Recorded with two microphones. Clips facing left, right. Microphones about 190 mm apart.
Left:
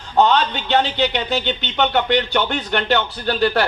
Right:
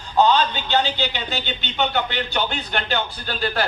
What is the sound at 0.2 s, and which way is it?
Speech, 70° left (ahead or behind).